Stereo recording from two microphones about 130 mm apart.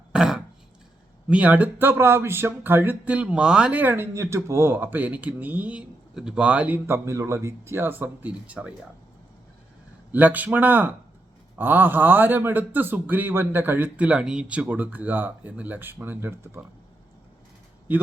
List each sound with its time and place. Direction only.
0.1 s throat clearing: 5° right (ahead or behind)
1.3 s speech: 10° right (ahead or behind)
10.1 s speech: 15° right (ahead or behind)